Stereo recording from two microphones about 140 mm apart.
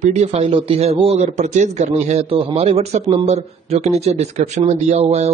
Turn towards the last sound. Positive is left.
turn(degrees=-50)  # may be behind; listen again after turning